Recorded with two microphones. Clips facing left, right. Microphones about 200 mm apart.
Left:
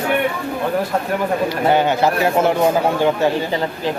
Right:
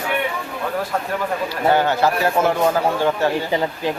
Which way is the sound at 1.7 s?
15° left (ahead or behind).